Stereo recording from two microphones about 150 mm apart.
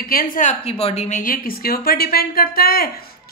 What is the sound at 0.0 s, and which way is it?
A woman's voice, 75° left (ahead or behind).